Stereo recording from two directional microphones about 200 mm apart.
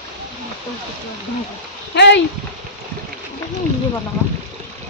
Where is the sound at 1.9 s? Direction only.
60° left (ahead or behind).